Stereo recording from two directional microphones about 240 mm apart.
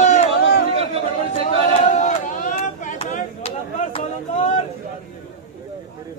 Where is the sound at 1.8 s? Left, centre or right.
Left.